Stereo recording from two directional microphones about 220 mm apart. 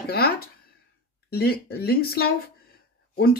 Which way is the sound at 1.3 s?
45° left (ahead or behind).